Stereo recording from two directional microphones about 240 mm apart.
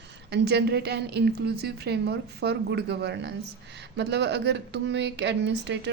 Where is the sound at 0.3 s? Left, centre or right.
Right.